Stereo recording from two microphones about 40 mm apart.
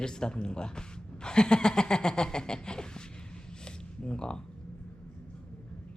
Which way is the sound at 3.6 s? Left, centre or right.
Left.